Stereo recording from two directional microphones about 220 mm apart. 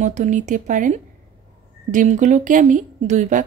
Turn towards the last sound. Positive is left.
turn(degrees=-35)  # may be behind; listen again after turning